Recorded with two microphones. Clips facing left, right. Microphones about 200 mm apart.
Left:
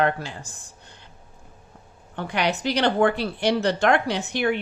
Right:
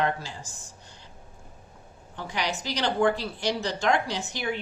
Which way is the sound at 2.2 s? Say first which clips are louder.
Left 6 dB; 60° left (ahead or behind).